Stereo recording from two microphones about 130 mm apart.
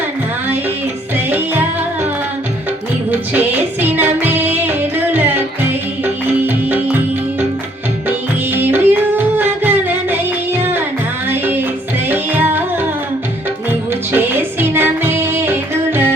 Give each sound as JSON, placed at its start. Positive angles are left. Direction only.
{"t": 1.1, "sound": "music", "side_deg": -15}
{"t": 3.1, "sound": "music", "side_deg": -15}
{"t": 8.5, "sound": "music", "side_deg": -15}
{"t": 13.7, "sound": "music", "side_deg": -15}